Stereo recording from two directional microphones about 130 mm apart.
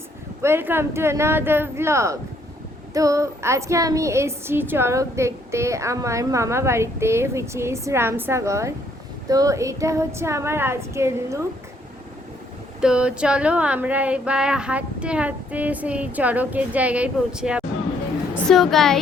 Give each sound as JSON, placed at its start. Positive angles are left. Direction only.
{"t": 0.4, "sound": "speech", "side_deg": -15}
{"t": 12.8, "sound": "a woman's voice", "side_deg": -5}